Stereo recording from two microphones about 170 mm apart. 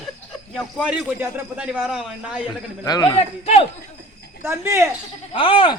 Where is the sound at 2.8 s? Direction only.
20° left (ahead or behind).